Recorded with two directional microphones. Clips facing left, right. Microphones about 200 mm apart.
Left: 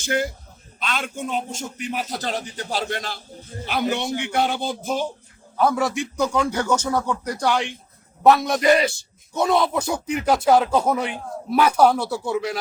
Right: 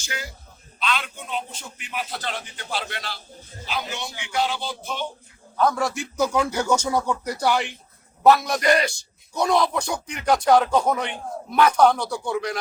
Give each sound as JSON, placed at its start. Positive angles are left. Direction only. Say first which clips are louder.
{"t": 0.0, "sound": "a man's voice", "louder": "left 12 dB", "side_deg": 50}
{"t": 3.7, "sound": "speech", "louder": "left 8 dB", "side_deg": 55}
{"t": 5.5, "sound": "a man's voice", "louder": "left 2 dB", "side_deg": 5}